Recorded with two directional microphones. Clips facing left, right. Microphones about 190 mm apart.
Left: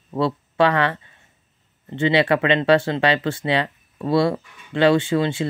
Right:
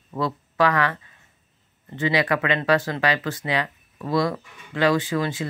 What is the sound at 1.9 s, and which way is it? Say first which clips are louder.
Speech: left 4 dB; 30° left (ahead or behind).